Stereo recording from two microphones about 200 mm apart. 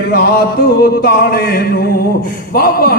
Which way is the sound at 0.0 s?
50° left (ahead or behind).